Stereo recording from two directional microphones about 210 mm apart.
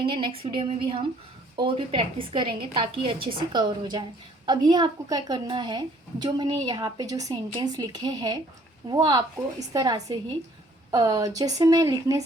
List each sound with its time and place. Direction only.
0.0 s speech: 25° right (ahead or behind)